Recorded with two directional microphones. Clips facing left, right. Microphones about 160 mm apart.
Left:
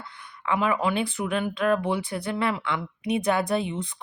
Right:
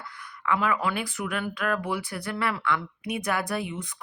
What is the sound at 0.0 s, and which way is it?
Speech, 25° left (ahead or behind).